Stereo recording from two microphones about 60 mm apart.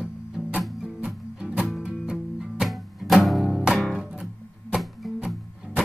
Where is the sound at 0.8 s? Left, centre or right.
Centre.